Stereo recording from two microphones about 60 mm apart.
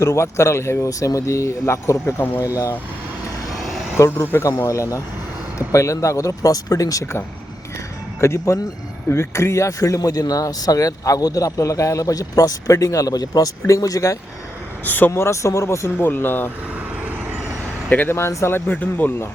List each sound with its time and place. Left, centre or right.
0.0 s speech: left
0.8 s speech: left
4.0 s speech: left
8.2 s speech: left
14.8 s speech: left
15.1 s speech: left
16.0 s speech: left
17.8 s speech: left
18.3 s speech: left
18.7 s speech: left